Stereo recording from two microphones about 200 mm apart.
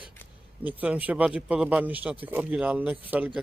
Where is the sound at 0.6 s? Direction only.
10° right (ahead or behind).